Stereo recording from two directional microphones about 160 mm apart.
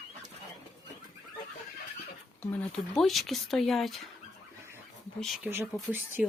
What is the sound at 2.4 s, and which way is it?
Speech, 10° left (ahead or behind).